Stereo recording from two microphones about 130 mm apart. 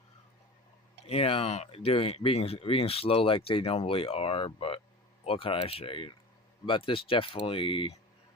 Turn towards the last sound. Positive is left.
turn(degrees=45)  # may be behind; listen again after turning